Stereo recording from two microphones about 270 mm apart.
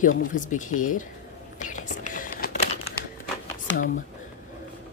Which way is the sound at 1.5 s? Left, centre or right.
Left.